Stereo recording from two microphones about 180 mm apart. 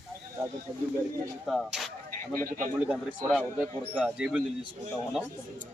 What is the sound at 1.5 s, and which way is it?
A man's voice, centre (ahead or behind).